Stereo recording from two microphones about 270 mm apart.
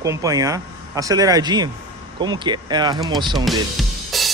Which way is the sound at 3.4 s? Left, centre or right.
Centre.